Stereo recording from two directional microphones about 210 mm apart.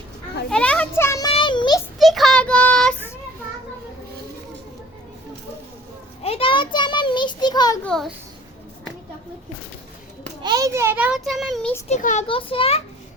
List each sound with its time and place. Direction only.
0.5 s a sound: 5° left (ahead or behind); by 1.8 s 20° left (ahead or behind)
2.0 s child singing: centre (ahead or behind)
6.2 s child singing: 25° left (ahead or behind)
7.9 s a child's voice: centre (ahead or behind)
10.4 s a sound: 20° right (ahead or behind); by 11.7 s centre (ahead or behind)
11.9 s a child's voice: 35° left (ahead or behind)
12.3 s a child's voice: 25° left (ahead or behind)